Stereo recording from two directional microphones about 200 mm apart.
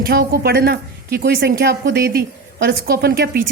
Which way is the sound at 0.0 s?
50° right (ahead or behind).